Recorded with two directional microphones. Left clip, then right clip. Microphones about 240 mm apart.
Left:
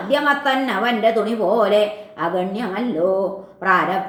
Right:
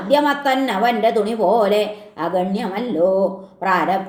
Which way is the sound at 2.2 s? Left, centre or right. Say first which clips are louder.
Right 1 dB; right.